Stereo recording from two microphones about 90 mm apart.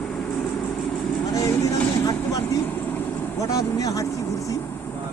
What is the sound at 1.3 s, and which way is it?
Speech, 35° left (ahead or behind).